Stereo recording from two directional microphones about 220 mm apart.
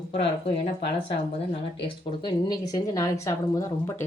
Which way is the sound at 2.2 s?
20° left (ahead or behind).